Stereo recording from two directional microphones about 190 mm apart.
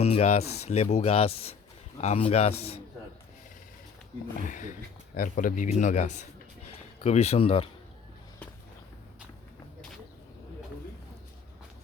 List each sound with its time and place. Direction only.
0.0 s speech: 35° left (ahead or behind)
4.4 s speech: 40° left (ahead or behind)